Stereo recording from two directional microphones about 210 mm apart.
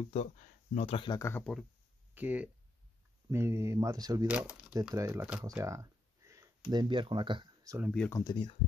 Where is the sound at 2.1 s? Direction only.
10° right (ahead or behind).